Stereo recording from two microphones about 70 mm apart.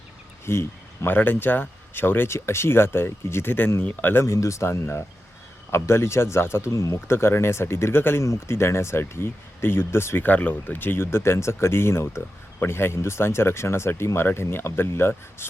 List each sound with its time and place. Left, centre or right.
0.4 s speech: left
1.1 s speech: left
4.2 s speech: left
7.1 s speech: left
10.2 s speech: left